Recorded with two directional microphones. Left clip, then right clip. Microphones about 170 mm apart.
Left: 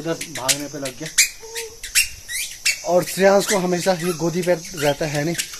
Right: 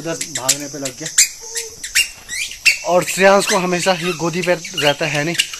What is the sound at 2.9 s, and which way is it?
Speech, 5° right (ahead or behind).